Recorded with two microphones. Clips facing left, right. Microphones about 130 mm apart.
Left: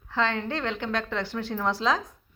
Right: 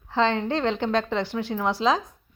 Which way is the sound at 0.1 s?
25° right (ahead or behind).